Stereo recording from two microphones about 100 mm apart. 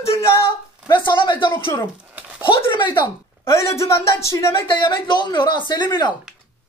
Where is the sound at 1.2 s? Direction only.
55° left (ahead or behind).